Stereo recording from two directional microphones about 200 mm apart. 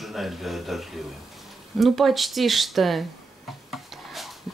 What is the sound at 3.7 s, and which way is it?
Wood, centre (ahead or behind).